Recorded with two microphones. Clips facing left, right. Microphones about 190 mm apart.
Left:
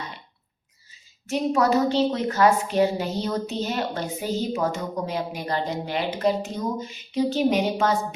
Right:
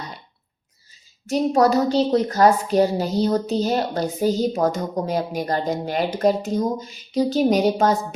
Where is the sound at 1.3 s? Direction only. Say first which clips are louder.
Right 4 dB; 35° right (ahead or behind).